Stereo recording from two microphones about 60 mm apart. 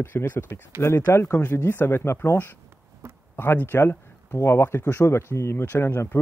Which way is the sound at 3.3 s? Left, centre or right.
Left.